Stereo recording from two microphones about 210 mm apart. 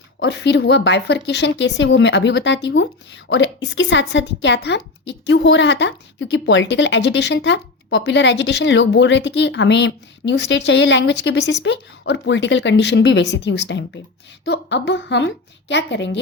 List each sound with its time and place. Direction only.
0.2 s a woman's voice: 55° left (ahead or behind)